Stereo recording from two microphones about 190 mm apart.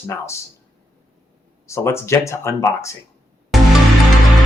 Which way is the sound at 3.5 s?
Centre (ahead or behind).